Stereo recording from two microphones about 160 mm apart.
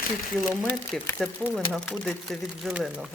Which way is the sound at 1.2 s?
5° right (ahead or behind).